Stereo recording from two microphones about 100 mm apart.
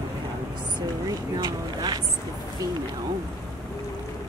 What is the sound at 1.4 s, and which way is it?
Speech, 45° right (ahead or behind).